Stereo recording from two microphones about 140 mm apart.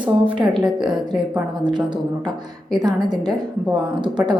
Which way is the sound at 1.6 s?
30° right (ahead or behind).